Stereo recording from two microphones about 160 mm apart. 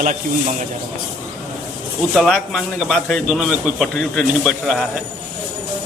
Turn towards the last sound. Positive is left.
turn(degrees=0)  # may be behind; listen again after turning